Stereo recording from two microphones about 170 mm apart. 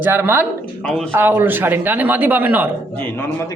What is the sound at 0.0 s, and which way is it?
Speech, 15° right (ahead or behind).